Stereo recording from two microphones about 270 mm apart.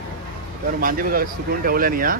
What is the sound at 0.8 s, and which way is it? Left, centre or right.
Speech, right.